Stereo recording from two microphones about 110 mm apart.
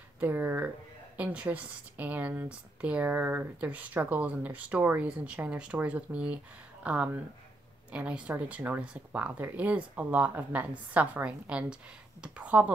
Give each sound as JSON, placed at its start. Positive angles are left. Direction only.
{"t": 0.2, "sound": "speech", "side_deg": -15}